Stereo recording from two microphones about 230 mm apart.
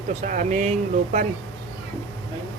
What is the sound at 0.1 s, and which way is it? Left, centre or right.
Speech, right.